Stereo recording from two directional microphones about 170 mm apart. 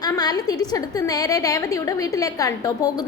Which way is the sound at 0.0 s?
25° left (ahead or behind).